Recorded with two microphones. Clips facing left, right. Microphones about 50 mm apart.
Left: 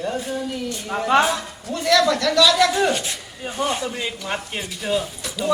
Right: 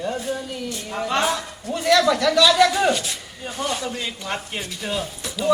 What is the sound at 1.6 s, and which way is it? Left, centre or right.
Speech, centre.